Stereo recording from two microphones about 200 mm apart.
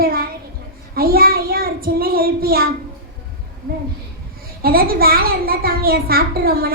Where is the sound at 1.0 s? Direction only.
50° right (ahead or behind).